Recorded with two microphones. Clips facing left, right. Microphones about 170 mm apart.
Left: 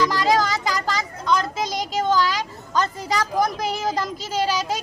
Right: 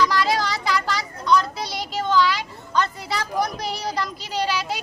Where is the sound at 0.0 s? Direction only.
45° left (ahead or behind).